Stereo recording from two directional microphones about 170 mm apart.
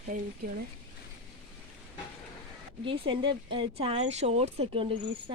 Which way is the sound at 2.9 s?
30° right (ahead or behind).